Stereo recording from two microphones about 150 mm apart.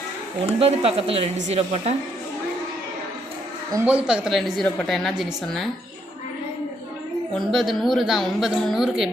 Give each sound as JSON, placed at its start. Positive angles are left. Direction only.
{"t": 0.6, "sound": "a woman's voice", "side_deg": -40}
{"t": 3.8, "sound": "a woman's voice", "side_deg": -10}
{"t": 7.3, "sound": "a woman's voice", "side_deg": 0}